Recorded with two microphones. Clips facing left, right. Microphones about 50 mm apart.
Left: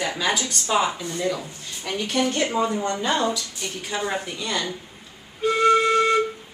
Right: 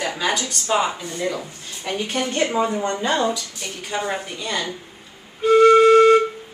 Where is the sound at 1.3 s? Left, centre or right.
Centre.